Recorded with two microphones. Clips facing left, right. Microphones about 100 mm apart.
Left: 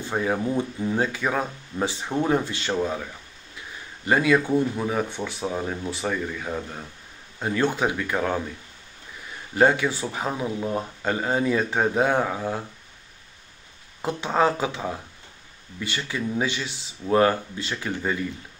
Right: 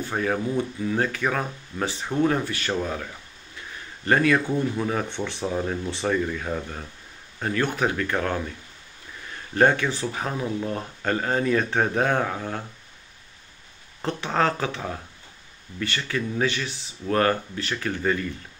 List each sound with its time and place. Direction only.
0.1 s speech: 10° left (ahead or behind)
2.4 s speech: 25° left (ahead or behind)
4.0 s speech: 15° left (ahead or behind)
7.4 s speech: 20° left (ahead or behind)
9.6 s speech: 15° left (ahead or behind)
14.0 s speech: 15° left (ahead or behind)